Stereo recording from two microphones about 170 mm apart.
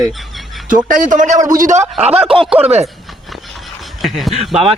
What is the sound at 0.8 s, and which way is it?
Speech, 50° right (ahead or behind).